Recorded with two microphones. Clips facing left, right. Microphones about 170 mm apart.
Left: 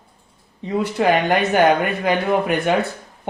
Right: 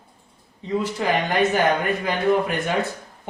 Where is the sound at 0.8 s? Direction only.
65° left (ahead or behind).